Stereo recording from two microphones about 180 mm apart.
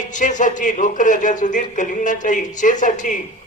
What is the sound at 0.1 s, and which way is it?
A man's voice, 45° left (ahead or behind).